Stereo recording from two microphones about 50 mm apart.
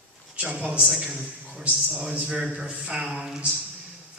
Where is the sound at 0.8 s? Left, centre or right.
Centre.